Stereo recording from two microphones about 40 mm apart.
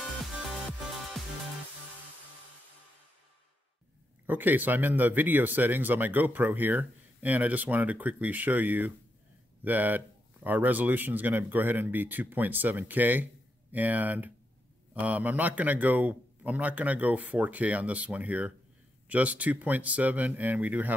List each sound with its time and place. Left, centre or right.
4.3 s a man's voice: right